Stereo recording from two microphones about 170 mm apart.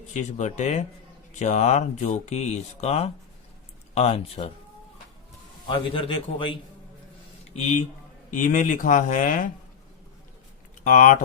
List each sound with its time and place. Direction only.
0.1 s speech: 45° left (ahead or behind)
5.6 s speech: 30° left (ahead or behind)
7.5 s speech: 45° left (ahead or behind)
10.8 s speech: 45° left (ahead or behind)